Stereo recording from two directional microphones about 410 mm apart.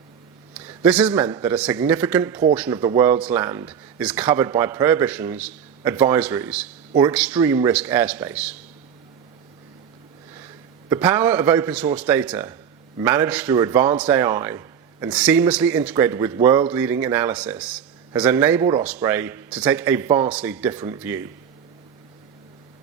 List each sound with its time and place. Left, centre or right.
0.5 s a man's voice: centre
10.8 s a man's voice: centre